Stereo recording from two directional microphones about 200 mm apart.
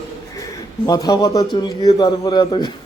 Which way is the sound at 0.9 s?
20° left (ahead or behind).